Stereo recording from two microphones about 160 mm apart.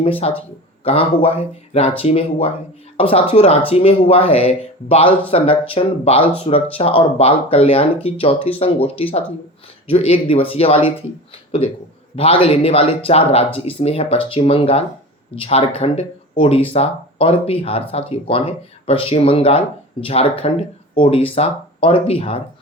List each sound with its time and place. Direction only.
0.2 s speech: 40° left (ahead or behind)
12.1 s speech: 35° left (ahead or behind)